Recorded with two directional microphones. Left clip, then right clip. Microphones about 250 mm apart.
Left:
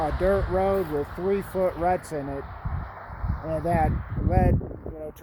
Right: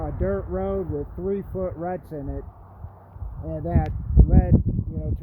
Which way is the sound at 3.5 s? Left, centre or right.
Centre.